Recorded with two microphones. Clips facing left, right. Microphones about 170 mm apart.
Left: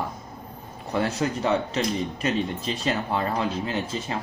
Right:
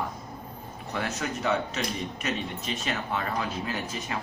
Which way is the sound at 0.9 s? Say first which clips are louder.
Left 7 dB; 30° left (ahead or behind).